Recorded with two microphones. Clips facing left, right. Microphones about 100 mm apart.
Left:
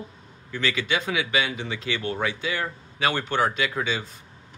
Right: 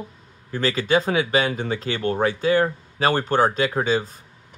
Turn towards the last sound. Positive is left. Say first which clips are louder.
# right 6 dB
turn(degrees=-40)  # may be behind; listen again after turning